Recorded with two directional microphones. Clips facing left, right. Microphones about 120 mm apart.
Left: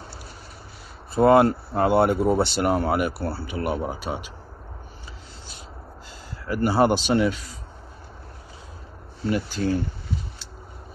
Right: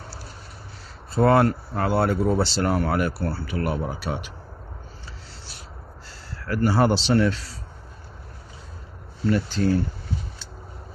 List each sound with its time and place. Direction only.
1.1 s speech: 15° left (ahead or behind)
3.3 s speech: 25° left (ahead or behind)
6.4 s speech: 15° left (ahead or behind)
9.2 s speech: 10° left (ahead or behind)